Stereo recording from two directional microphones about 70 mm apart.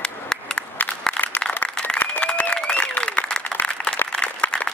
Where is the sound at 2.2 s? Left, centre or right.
Centre.